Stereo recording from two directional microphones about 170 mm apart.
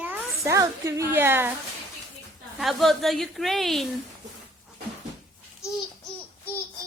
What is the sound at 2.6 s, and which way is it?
A woman's voice, centre (ahead or behind).